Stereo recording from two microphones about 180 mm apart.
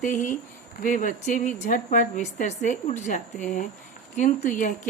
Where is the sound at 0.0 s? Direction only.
45° left (ahead or behind).